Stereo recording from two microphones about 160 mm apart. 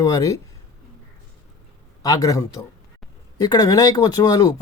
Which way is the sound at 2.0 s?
20° left (ahead or behind).